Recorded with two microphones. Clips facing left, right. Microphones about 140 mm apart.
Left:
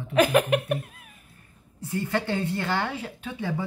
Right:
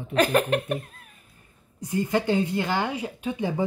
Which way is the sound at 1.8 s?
15° right (ahead or behind).